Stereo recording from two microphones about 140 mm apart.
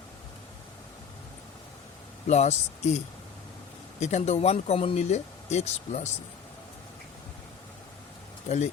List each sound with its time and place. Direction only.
2.2 s speech: 55° left (ahead or behind)
4.0 s speech: 55° left (ahead or behind)
8.4 s speech: 55° left (ahead or behind)